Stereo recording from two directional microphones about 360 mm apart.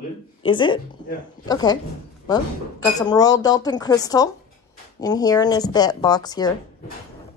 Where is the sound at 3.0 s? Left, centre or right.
Centre.